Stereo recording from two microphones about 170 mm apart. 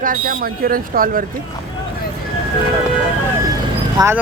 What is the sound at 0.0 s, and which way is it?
Speech, 55° right (ahead or behind).